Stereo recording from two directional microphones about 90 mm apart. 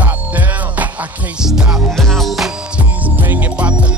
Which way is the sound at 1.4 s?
10° right (ahead or behind).